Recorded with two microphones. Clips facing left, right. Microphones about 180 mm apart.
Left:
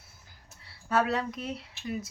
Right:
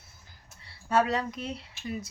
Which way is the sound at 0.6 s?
Centre (ahead or behind).